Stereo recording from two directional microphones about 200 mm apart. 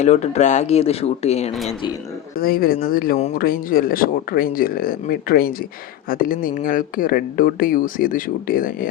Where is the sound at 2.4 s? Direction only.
45° left (ahead or behind).